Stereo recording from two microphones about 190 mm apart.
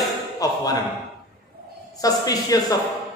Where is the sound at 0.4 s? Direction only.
20° left (ahead or behind).